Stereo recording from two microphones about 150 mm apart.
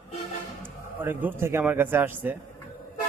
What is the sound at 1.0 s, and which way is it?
A man's voice, 15° right (ahead or behind).